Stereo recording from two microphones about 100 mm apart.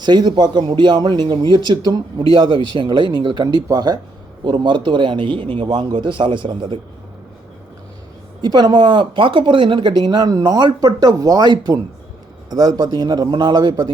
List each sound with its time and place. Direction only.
0.0 s a man's voice: 45° right (ahead or behind)
8.4 s a man's voice: 45° right (ahead or behind)